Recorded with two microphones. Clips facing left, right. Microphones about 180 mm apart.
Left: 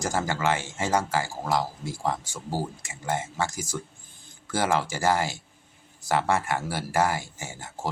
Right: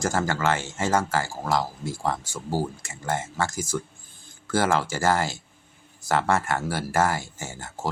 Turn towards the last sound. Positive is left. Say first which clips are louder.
# right 2 dB
turn(degrees=15)  # may be behind; listen again after turning